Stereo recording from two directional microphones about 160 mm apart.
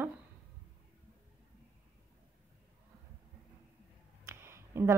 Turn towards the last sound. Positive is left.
turn(degrees=-15)  # may be behind; listen again after turning